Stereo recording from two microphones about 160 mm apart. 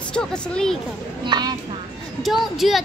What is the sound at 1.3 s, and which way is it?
Speech, 25° right (ahead or behind).